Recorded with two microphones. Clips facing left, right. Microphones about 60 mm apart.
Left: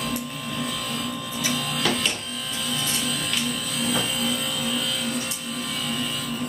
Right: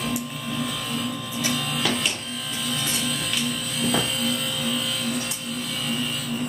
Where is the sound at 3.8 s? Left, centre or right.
Centre.